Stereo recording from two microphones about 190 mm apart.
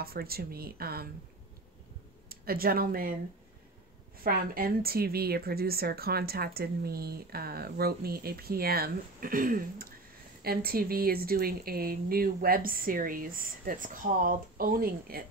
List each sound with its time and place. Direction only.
0.0 s a woman's voice: 55° right (ahead or behind)
2.2 s speech: 50° right (ahead or behind)
4.2 s a woman's voice: 50° right (ahead or behind)